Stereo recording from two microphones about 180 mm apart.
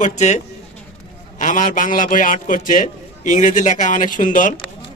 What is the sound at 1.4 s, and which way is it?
A man's voice, 45° left (ahead or behind).